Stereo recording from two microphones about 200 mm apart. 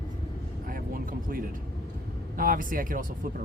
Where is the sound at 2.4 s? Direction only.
45° right (ahead or behind).